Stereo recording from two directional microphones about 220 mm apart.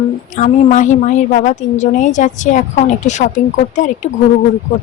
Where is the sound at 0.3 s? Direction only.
35° left (ahead or behind).